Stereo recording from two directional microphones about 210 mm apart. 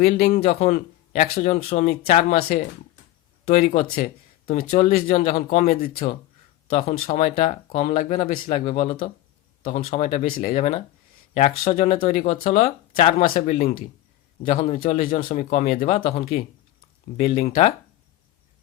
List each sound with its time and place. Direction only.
0.0 s speech: 40° left (ahead or behind)
0.6 s speech: 35° left (ahead or behind)
3.4 s speech: 35° left (ahead or behind)
6.7 s speech: 25° left (ahead or behind)